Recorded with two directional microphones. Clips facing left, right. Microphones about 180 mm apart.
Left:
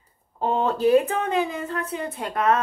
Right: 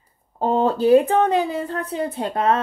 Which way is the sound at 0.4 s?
35° right (ahead or behind).